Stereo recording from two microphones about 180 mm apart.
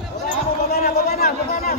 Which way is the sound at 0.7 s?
55° left (ahead or behind).